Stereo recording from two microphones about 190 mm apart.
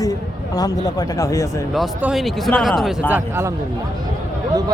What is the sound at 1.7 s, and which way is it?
Speech, centre (ahead or behind).